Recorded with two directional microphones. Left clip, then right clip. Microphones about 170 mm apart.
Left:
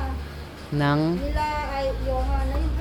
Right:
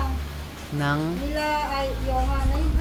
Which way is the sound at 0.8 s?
20° left (ahead or behind).